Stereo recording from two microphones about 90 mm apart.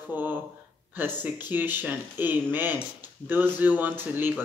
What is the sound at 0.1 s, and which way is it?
Speech, 20° right (ahead or behind).